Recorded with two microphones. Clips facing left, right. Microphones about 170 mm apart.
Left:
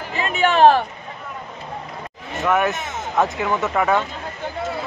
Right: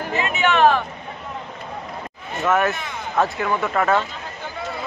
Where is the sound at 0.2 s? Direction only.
35° left (ahead or behind).